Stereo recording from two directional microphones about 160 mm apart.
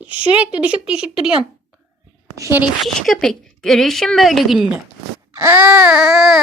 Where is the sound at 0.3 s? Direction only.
10° right (ahead or behind).